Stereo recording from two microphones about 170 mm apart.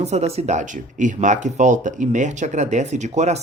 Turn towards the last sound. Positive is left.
turn(degrees=-40)  # may be behind; listen again after turning